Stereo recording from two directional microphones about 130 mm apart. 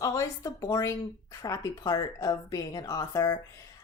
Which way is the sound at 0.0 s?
25° left (ahead or behind).